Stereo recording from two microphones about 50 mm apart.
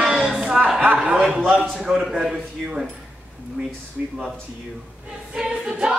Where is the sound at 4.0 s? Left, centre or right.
Centre.